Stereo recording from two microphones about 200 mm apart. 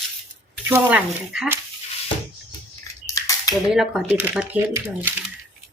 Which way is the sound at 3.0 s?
15° left (ahead or behind).